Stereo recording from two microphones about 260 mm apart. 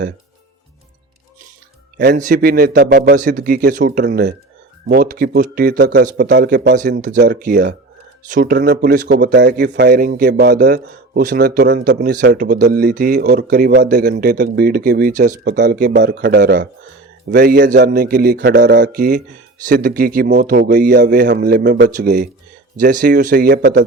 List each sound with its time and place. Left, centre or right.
2.0 s a man's voice: right